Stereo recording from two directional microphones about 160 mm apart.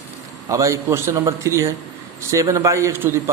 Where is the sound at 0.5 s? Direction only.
20° right (ahead or behind).